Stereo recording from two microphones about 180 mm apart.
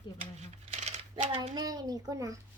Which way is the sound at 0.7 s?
40° right (ahead or behind).